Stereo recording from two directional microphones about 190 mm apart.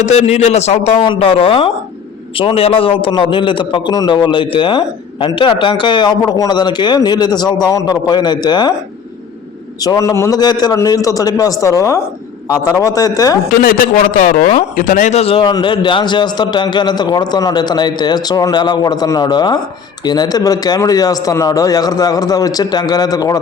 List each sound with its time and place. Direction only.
0.0 s a man's voice: 35° left (ahead or behind)
9.8 s a man's voice: 20° left (ahead or behind)
13.6 s speech: 50° left (ahead or behind); by 23.4 s 20° left (ahead or behind)